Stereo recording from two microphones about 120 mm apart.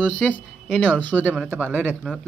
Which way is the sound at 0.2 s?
5° left (ahead or behind).